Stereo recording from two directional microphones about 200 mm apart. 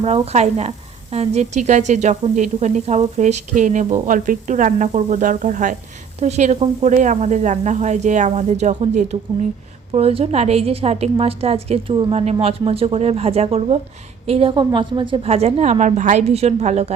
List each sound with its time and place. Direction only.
0.0 s a woman's voice: 30° right (ahead or behind)